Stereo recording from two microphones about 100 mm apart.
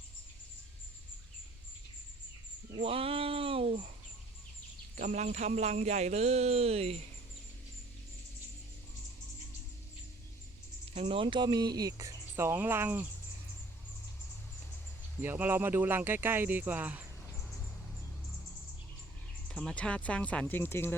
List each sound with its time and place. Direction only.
2.8 s speech: 70° right (ahead or behind)
5.4 s speech: 90° right
10.9 s speech: 60° right (ahead or behind); by 13.1 s 20° right (ahead or behind)
15.2 s speech: 20° right (ahead or behind)
19.5 s speech: 10° left (ahead or behind)
20.6 s speech: 25° left (ahead or behind)